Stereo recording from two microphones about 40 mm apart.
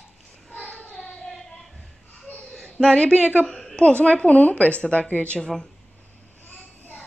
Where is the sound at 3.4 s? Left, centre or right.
Centre.